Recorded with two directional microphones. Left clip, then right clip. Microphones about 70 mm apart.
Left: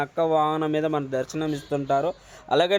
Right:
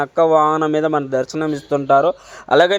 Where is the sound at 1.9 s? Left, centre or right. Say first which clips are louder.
Right 11 dB; right.